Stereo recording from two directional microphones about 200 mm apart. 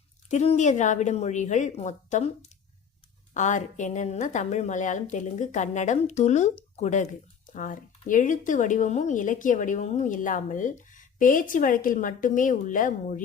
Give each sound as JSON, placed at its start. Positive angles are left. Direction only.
{"t": 0.3, "sound": "a woman's voice", "side_deg": 35}